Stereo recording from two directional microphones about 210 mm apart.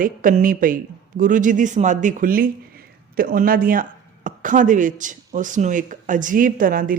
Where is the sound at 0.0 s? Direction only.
40° right (ahead or behind).